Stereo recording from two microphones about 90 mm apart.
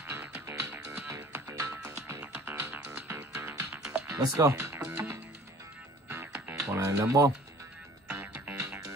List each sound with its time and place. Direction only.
0.0 s music: 25° right (ahead or behind)
4.2 s speech: 30° right (ahead or behind)
4.7 s music: 15° right (ahead or behind)
6.0 s music: 30° right (ahead or behind)
8.1 s music: 20° right (ahead or behind)